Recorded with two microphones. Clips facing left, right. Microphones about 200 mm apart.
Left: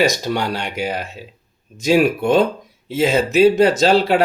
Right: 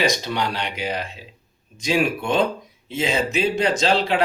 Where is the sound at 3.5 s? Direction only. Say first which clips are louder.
Left 6 dB; 40° left (ahead or behind).